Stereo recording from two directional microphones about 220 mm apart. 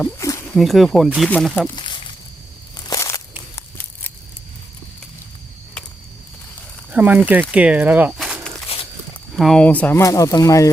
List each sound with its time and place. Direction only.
0.0 s speech: 15° left (ahead or behind)
0.5 s speech: centre (ahead or behind)
1.7 s a sound: 20° left (ahead or behind)
2.7 s crushing: 15° left (ahead or behind)
6.9 s speech: 5° right (ahead or behind); by 10.7 s 15° left (ahead or behind)